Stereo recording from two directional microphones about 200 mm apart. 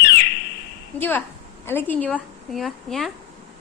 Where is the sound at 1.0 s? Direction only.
10° left (ahead or behind).